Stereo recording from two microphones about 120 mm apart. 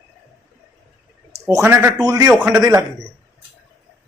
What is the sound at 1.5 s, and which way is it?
Speech, 20° right (ahead or behind).